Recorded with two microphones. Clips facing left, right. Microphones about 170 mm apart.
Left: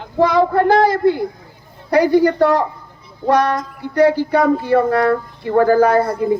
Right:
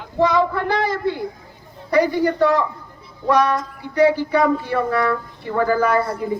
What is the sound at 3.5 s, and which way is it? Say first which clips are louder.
Music: left 3 dB; 45° left (ahead or behind).